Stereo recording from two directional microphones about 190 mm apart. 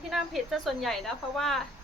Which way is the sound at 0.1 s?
Centre (ahead or behind).